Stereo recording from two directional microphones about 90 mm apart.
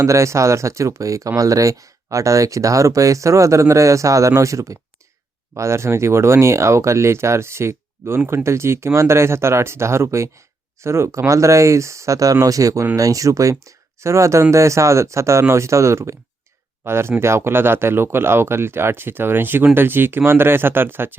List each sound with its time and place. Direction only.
0.0 s speech: 35° right (ahead or behind)